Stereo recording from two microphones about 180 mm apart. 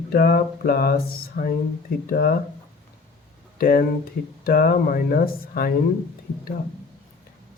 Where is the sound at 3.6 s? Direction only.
55° left (ahead or behind).